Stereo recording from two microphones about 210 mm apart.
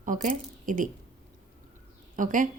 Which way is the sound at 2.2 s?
40° right (ahead or behind).